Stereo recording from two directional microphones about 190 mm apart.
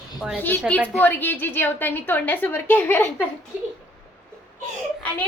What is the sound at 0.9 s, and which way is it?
A woman's voice, 10° left (ahead or behind).